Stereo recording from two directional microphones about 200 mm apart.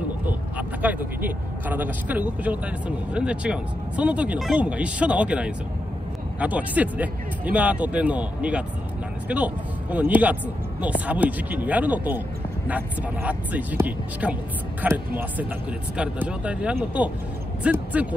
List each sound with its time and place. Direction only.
0.3 s speech: 10° right (ahead or behind)